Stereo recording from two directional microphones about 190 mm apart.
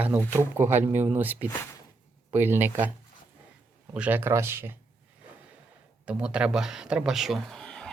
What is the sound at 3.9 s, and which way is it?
Speech, 10° right (ahead or behind).